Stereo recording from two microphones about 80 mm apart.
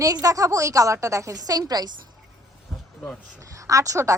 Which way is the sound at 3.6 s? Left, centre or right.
Right.